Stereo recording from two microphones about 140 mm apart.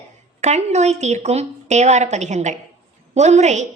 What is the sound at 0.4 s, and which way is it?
A woman's voice, 55° right (ahead or behind).